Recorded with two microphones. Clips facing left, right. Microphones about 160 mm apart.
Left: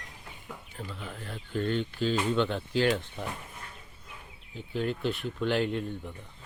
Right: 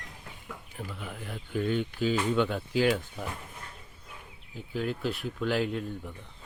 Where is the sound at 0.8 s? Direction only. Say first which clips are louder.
Right 1 dB; 10° right (ahead or behind).